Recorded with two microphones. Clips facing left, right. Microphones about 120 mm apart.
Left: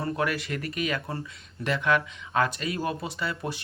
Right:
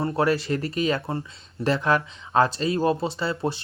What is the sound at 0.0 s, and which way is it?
Speech, 30° right (ahead or behind).